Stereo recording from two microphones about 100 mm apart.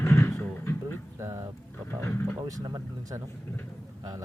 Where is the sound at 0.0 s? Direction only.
25° left (ahead or behind).